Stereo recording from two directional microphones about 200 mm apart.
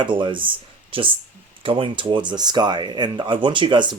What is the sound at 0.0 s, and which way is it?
Speech, 25° right (ahead or behind).